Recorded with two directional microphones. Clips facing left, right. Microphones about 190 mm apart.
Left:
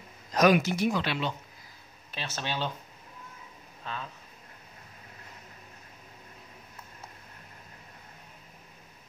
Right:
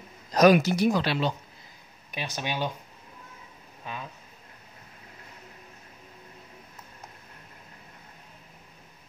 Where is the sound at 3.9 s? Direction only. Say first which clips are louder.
Even; 10° right (ahead or behind).